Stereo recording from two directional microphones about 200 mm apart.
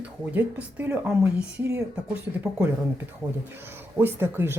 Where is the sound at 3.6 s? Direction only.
10° right (ahead or behind).